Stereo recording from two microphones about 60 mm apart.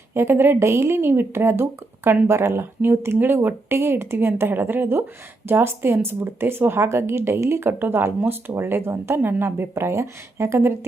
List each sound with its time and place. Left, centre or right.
0.1 s a woman's voice: right